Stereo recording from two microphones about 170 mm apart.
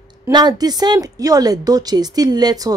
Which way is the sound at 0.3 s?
25° right (ahead or behind).